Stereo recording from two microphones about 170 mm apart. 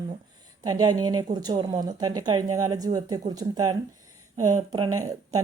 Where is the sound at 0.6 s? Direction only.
25° right (ahead or behind).